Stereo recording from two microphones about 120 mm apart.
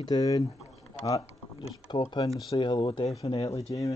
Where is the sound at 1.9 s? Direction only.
40° left (ahead or behind).